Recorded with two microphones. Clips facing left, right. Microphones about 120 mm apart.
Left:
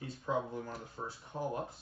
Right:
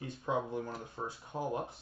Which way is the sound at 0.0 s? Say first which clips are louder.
Right 1 dB; 20° right (ahead or behind).